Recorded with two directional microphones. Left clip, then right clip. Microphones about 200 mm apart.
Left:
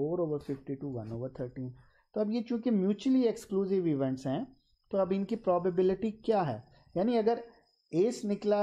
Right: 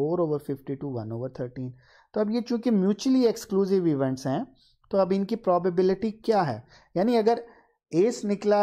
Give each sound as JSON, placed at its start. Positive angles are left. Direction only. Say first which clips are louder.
{"t": 0.0, "sound": "speech", "louder": "right 6 dB", "side_deg": -30}